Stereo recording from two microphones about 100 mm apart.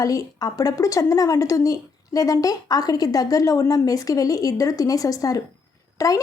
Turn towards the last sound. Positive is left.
turn(degrees=35)  # may be behind; listen again after turning